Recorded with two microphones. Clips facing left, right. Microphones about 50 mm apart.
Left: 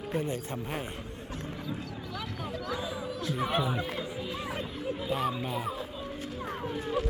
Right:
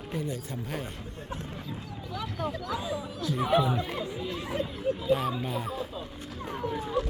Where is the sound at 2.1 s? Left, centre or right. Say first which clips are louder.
Right 5 dB; centre.